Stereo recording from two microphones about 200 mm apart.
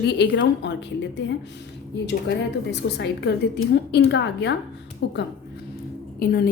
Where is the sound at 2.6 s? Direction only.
55° left (ahead or behind).